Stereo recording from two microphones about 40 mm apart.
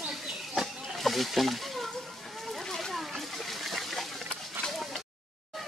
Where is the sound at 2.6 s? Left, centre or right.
Centre.